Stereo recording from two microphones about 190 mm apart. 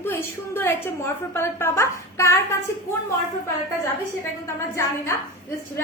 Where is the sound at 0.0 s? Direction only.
10° left (ahead or behind).